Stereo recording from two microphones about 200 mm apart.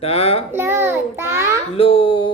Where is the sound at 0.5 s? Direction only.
10° right (ahead or behind).